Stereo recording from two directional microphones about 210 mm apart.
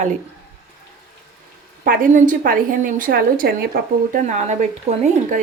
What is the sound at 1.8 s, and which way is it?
Speech, 40° right (ahead or behind).